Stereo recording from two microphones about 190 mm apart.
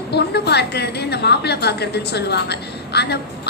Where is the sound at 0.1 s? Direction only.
60° left (ahead or behind).